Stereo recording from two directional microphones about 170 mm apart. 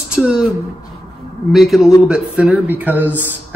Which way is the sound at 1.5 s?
Centre (ahead or behind).